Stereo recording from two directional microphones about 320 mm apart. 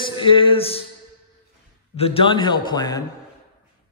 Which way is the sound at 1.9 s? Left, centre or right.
Centre.